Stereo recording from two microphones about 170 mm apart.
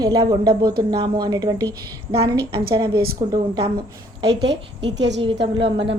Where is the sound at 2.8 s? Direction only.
65° right (ahead or behind).